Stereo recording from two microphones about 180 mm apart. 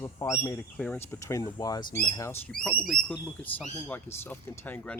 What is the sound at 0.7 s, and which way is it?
Speech, 10° left (ahead or behind).